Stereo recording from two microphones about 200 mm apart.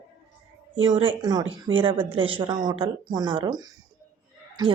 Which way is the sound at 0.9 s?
25° right (ahead or behind).